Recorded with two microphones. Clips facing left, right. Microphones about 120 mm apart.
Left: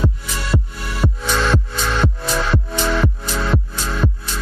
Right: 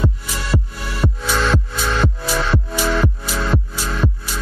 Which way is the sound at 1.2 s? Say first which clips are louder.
Even; centre (ahead or behind).